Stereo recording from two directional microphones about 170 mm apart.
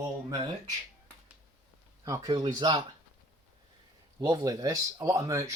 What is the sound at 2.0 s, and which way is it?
Speech, 20° right (ahead or behind).